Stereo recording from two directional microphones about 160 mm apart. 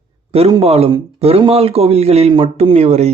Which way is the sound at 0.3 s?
35° right (ahead or behind).